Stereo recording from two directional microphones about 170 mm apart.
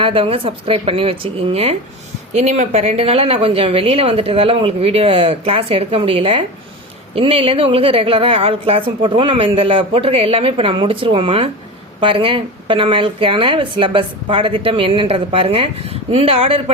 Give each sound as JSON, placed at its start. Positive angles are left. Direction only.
{"t": 0.0, "sound": "speech", "side_deg": -30}